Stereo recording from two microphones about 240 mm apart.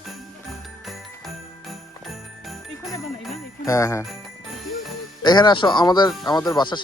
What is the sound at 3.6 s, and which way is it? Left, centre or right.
Speech, centre.